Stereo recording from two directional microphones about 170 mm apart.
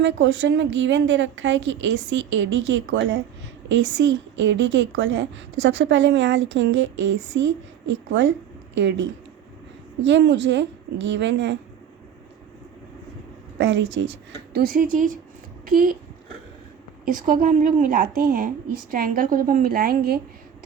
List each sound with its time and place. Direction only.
0.0 s a woman's voice: 90° right
8.7 s a woman's voice: 90° right
13.6 s a woman's voice: 90° right; by 16.0 s 60° right (ahead or behind)
17.1 s a woman's voice: 55° right (ahead or behind)